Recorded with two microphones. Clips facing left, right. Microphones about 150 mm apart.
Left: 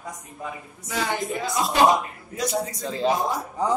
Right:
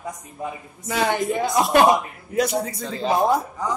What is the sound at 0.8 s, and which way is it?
Speech, 60° right (ahead or behind).